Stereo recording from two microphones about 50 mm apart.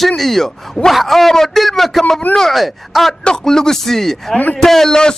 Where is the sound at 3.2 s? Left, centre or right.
Centre.